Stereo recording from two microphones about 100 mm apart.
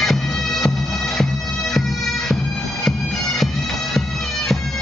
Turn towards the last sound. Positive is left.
turn(degrees=5)  # may be behind; listen again after turning